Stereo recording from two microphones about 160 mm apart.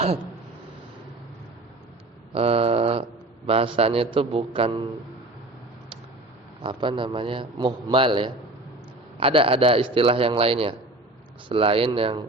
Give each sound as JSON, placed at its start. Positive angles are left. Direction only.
{"t": 2.3, "sound": "a man's voice", "side_deg": -35}
{"t": 6.6, "sound": "a man's voice", "side_deg": -30}